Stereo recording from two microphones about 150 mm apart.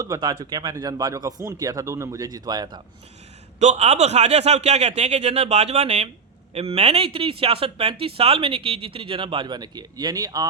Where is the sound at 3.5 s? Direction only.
50° right (ahead or behind).